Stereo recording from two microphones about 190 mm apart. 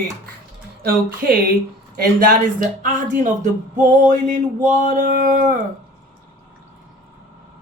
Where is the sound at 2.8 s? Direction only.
40° right (ahead or behind).